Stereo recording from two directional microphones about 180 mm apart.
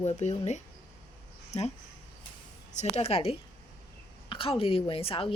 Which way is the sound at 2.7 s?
40° left (ahead or behind).